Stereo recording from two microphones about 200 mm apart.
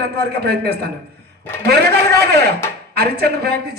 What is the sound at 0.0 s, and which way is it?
A man's voice, 55° right (ahead or behind).